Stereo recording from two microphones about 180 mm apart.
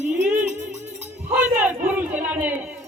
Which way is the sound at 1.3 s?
10° right (ahead or behind).